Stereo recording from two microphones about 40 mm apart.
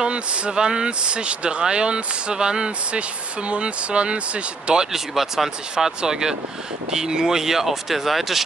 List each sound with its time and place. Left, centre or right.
0.0 s speech: right
4.9 s speech: centre